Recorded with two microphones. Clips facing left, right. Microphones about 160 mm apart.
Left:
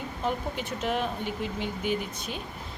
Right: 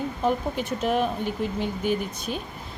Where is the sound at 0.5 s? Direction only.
45° right (ahead or behind).